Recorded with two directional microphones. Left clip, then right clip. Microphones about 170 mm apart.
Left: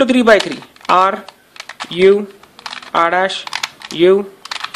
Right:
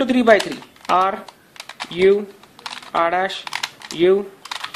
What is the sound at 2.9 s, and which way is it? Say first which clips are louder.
Speech: left 5 dB; 20° left (ahead or behind).